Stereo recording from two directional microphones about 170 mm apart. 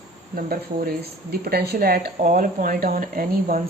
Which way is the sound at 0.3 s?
55° right (ahead or behind).